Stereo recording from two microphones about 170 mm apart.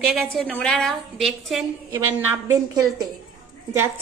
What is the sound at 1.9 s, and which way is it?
A woman's voice, 15° right (ahead or behind).